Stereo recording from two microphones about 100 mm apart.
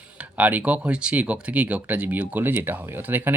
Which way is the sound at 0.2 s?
15° right (ahead or behind).